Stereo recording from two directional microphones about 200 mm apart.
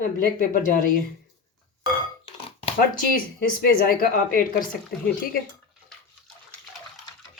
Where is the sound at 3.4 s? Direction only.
45° left (ahead or behind).